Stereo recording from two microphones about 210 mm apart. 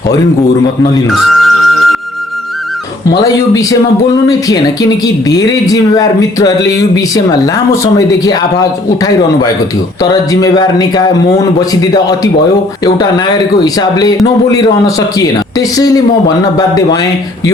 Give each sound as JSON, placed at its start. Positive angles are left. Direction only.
{"t": 1.0, "sound": "music", "side_deg": 0}
{"t": 3.2, "sound": "speech", "side_deg": 15}